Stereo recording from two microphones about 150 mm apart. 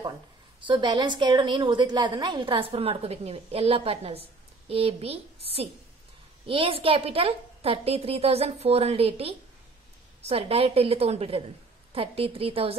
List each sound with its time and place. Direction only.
0.7 s a woman's voice: 30° right (ahead or behind)